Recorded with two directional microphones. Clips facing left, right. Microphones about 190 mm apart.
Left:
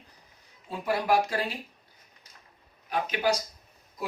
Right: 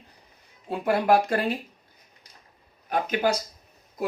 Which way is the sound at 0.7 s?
55° right (ahead or behind).